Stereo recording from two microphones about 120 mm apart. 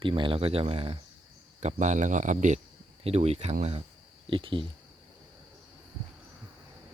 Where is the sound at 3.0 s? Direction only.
60° right (ahead or behind).